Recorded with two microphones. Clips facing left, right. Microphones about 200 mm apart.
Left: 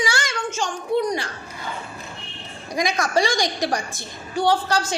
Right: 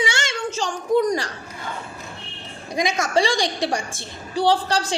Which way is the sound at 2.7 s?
25° right (ahead or behind).